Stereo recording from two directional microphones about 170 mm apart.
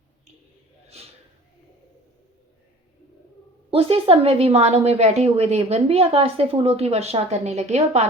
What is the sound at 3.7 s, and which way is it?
A woman's voice, 35° right (ahead or behind).